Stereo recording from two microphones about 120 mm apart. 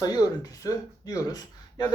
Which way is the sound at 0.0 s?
35° left (ahead or behind).